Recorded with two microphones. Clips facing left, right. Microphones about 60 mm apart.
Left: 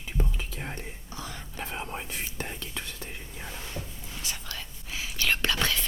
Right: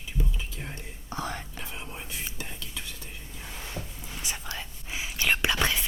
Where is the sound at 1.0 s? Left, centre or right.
Right.